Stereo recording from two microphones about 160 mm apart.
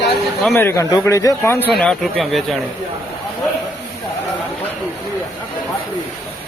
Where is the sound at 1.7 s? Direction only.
Centre (ahead or behind).